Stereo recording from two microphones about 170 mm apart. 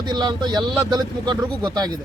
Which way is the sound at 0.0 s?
25° right (ahead or behind).